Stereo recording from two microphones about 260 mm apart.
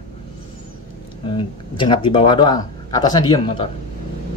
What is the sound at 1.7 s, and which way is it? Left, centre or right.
Speech, centre.